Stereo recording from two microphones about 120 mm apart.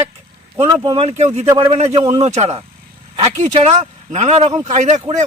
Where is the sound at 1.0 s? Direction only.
65° right (ahead or behind).